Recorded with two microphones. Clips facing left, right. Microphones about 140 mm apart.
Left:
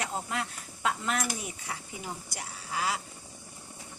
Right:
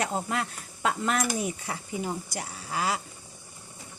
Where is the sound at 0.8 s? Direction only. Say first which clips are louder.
Right 3 dB; 45° right (ahead or behind).